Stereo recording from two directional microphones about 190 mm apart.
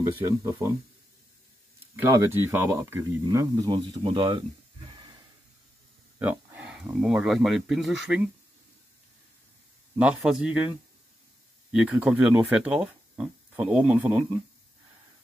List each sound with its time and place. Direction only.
0.0 s speech: 15° right (ahead or behind)
2.0 s speech: 10° right (ahead or behind)
4.9 s a sound: 25° right (ahead or behind)
6.1 s speech: 10° right (ahead or behind)
9.9 s speech: 5° right (ahead or behind)
11.7 s speech: 5° right (ahead or behind)